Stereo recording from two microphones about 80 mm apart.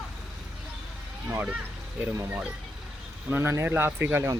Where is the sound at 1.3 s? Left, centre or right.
Centre.